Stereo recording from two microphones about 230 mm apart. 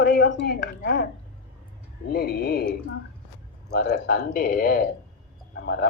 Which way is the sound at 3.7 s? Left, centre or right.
Left.